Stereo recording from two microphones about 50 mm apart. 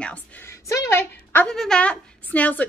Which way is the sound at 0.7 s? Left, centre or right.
Left.